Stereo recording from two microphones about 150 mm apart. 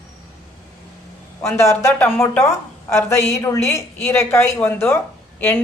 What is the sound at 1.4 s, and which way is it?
Speech, 15° left (ahead or behind).